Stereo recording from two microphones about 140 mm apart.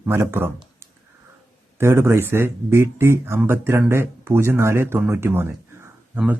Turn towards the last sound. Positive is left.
turn(degrees=-10)  # may be behind; listen again after turning